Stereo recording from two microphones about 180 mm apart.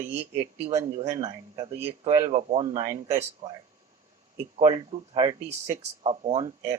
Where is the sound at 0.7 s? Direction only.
20° right (ahead or behind); by 3.5 s 40° right (ahead or behind).